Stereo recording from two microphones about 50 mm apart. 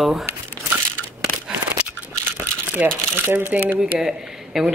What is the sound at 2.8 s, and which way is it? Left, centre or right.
Speech, right.